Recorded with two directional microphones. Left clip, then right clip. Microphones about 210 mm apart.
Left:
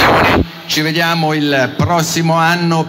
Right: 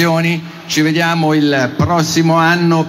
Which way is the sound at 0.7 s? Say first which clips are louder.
Right 2 dB; 35° left (ahead or behind).